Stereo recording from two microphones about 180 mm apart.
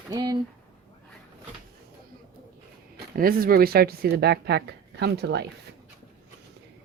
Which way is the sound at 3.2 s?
55° right (ahead or behind).